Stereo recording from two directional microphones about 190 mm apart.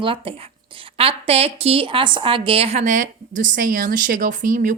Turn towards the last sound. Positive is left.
turn(degrees=-45)  # may be behind; listen again after turning